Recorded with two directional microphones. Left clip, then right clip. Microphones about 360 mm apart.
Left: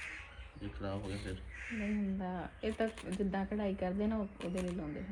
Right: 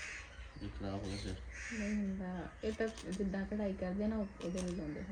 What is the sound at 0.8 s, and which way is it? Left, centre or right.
Speech, centre.